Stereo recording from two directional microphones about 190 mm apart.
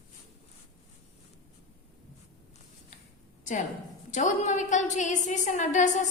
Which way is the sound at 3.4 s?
40° left (ahead or behind).